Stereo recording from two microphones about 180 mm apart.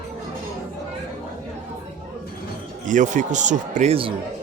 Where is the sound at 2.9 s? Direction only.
45° right (ahead or behind).